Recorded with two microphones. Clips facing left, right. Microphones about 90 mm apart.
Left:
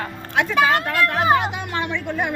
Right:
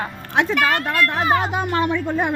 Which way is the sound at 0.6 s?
20° left (ahead or behind).